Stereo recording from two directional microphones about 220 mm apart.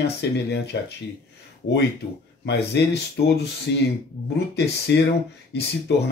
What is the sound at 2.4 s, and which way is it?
Speech, 50° left (ahead or behind).